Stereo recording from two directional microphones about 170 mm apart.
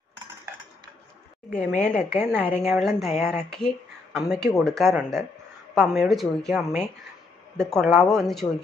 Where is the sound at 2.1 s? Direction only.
10° right (ahead or behind).